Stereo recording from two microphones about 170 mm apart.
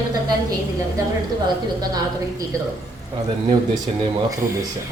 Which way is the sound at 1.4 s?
25° right (ahead or behind).